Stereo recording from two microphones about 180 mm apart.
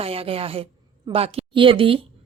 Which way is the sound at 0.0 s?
30° right (ahead or behind).